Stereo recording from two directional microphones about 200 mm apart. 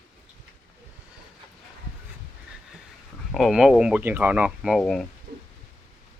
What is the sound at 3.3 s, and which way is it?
Speech, centre (ahead or behind).